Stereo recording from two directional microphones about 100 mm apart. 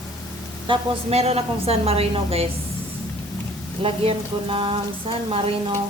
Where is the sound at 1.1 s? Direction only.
90° right.